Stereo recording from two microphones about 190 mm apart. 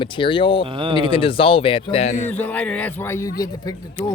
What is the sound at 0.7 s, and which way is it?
Speech, 25° right (ahead or behind).